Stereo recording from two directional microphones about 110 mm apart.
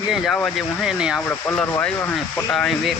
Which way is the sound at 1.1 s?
15° left (ahead or behind).